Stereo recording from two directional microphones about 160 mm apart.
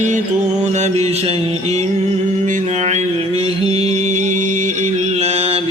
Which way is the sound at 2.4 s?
50° right (ahead or behind).